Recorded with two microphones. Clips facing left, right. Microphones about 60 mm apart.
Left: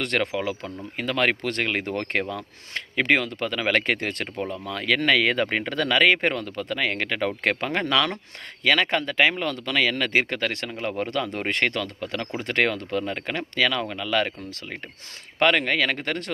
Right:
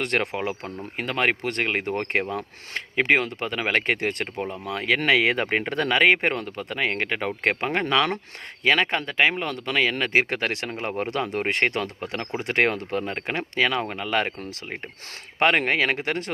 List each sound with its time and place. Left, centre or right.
0.0 s speech: centre
4.4 s speech: right
16.0 s speech: centre